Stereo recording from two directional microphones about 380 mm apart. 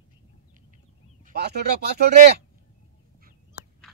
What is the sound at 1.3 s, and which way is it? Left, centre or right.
Speech, right.